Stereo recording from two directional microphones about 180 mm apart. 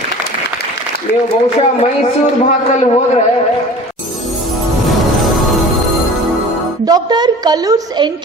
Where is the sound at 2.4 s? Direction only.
40° left (ahead or behind).